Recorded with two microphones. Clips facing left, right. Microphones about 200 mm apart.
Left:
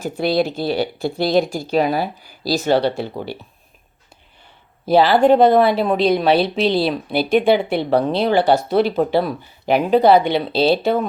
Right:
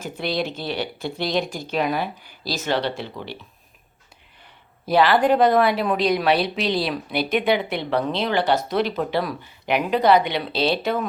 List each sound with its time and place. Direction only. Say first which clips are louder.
0.0 s speech: left 7 dB; 40° left (ahead or behind)
4.9 s speech: left 5 dB; 30° left (ahead or behind)